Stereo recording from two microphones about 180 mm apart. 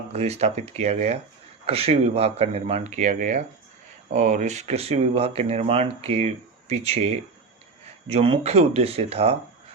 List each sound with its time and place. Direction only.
0.1 s speech: 35° right (ahead or behind)